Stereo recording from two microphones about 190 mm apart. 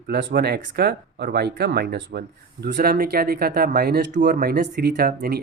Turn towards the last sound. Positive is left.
turn(degrees=-55)  # may be behind; listen again after turning